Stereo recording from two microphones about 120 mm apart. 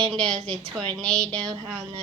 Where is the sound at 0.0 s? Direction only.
5° left (ahead or behind).